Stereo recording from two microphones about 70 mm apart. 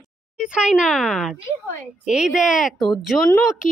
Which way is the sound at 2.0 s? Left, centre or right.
Centre.